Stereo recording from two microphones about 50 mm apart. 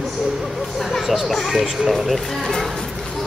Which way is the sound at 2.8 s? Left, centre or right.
Centre.